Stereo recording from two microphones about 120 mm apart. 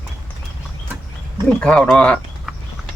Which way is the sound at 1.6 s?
5° left (ahead or behind).